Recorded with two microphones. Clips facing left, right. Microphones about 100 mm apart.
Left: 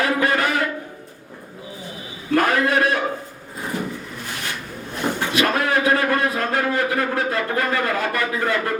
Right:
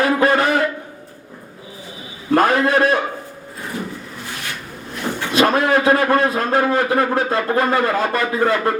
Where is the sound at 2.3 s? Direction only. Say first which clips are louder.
Right 3 dB; 30° right (ahead or behind).